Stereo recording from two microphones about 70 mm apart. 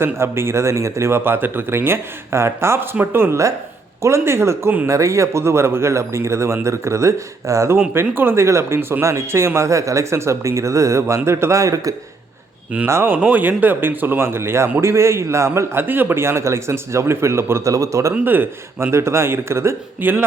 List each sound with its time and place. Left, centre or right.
0.0 s a man's voice: right
8.1 s a man's voice: right
12.9 s a man's voice: right
13.2 s a man's voice: right
18.1 s a man's voice: right